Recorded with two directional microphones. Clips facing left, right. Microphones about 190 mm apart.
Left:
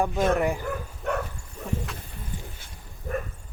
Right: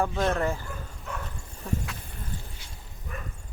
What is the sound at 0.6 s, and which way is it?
Bow-wow, 65° left (ahead or behind).